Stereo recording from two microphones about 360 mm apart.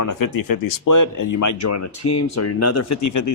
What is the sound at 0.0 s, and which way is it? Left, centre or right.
Speech, left.